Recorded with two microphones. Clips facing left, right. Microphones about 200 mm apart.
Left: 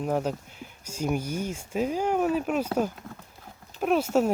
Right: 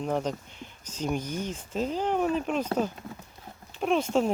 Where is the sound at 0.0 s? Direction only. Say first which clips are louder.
Left 2 dB; 5° left (ahead or behind).